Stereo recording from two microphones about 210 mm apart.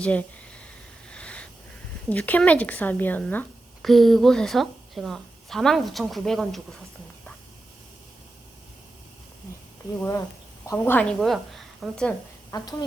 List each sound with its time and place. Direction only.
0.0 s a sound: 5° left (ahead or behind)
2.0 s a woman's voice: 5° left (ahead or behind)
10.7 s a woman's voice: 10° left (ahead or behind)
12.5 s speech: 20° left (ahead or behind)